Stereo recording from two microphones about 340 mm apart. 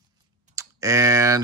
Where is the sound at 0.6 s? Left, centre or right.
Centre.